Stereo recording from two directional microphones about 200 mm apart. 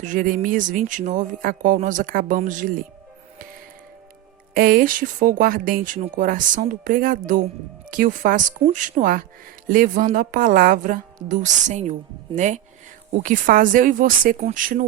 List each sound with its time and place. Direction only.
0.0 s a woman's voice: 40° right (ahead or behind)
4.5 s a woman's voice: 45° right (ahead or behind)